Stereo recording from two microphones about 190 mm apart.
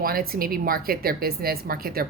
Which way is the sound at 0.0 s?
50° right (ahead or behind).